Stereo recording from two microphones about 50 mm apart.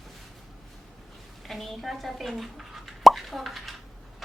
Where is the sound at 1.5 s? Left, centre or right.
Centre.